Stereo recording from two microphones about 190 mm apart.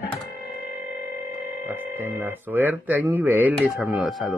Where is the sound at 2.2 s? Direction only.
10° right (ahead or behind).